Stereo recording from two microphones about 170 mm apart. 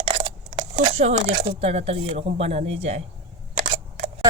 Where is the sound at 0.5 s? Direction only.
40° right (ahead or behind).